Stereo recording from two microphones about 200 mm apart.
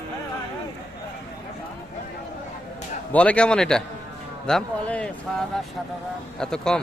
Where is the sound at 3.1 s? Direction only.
5° left (ahead or behind).